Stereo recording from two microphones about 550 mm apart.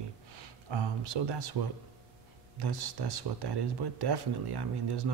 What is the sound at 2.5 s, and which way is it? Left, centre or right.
Speech, right.